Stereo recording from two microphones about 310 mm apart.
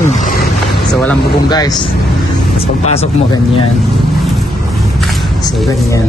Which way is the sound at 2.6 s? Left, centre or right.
Centre.